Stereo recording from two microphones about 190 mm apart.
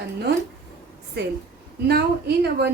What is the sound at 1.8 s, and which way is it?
Speech, 55° right (ahead or behind).